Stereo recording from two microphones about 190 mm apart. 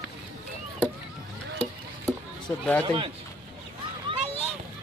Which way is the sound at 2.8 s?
25° right (ahead or behind).